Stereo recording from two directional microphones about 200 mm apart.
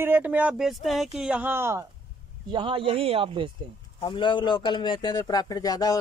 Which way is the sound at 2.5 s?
25° right (ahead or behind).